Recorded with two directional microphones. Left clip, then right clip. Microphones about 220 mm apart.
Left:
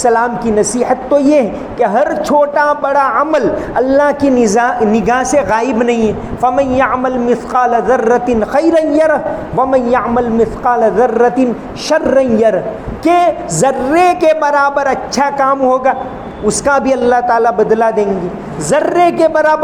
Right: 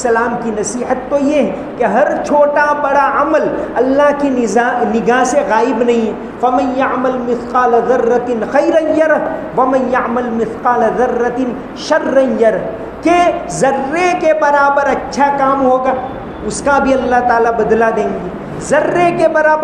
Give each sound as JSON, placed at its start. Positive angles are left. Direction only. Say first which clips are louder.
{"t": 0.0, "sound": "a woman's voice", "louder": "left 2 dB", "side_deg": 50}